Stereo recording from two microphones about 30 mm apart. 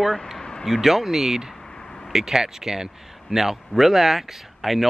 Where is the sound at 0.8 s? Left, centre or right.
Centre.